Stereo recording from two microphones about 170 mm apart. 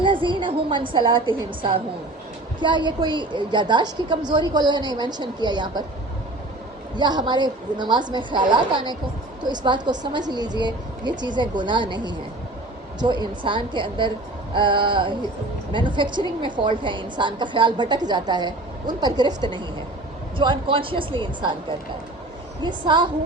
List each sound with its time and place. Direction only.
0.0 s a woman's voice: 30° right (ahead or behind)
6.9 s a woman's voice: 25° right (ahead or behind)